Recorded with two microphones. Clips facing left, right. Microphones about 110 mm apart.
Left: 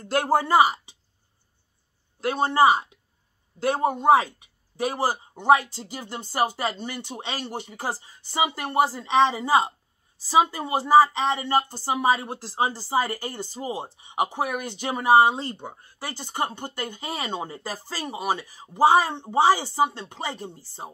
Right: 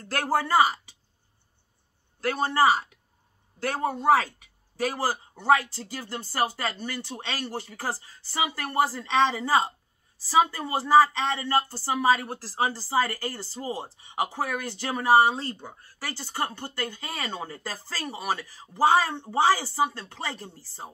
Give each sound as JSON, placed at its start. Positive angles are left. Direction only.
{"t": 0.0, "sound": "speech", "side_deg": 20}
{"t": 2.1, "sound": "speech", "side_deg": 20}